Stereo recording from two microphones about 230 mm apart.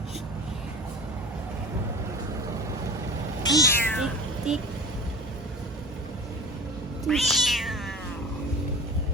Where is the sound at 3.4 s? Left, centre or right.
Centre.